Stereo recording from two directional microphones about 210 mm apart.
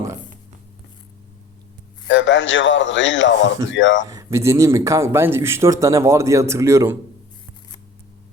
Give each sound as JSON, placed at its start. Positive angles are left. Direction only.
{"t": 2.0, "sound": "a man's voice", "side_deg": 60}
{"t": 4.0, "sound": "speech", "side_deg": -15}